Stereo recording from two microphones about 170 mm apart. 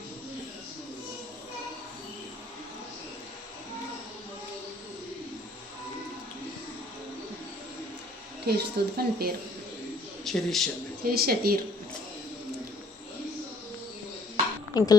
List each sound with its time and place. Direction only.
8.4 s speech: 70° right (ahead or behind)
10.2 s speech: centre (ahead or behind)
11.0 s speech: 65° right (ahead or behind)
14.7 s speech: 25° left (ahead or behind)